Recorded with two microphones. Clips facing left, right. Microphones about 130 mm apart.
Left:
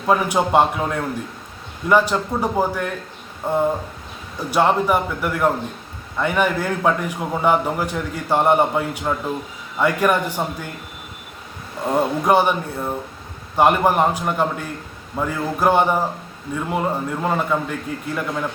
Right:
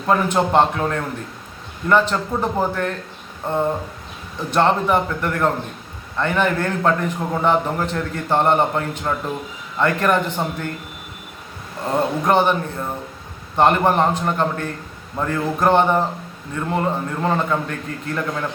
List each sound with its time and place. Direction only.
0.1 s a man's voice: 10° left (ahead or behind)
11.9 s a man's voice: 10° left (ahead or behind)